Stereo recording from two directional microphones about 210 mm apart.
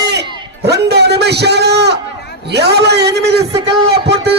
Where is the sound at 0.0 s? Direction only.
50° right (ahead or behind).